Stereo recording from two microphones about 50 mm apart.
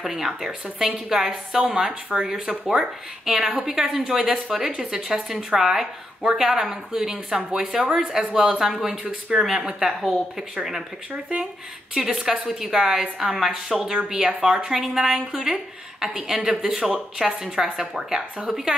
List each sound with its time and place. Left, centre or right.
0.0 s a woman's voice: centre
11.9 s a woman's voice: centre